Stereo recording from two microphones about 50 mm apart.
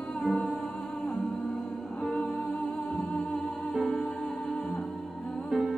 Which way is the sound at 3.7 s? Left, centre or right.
Left.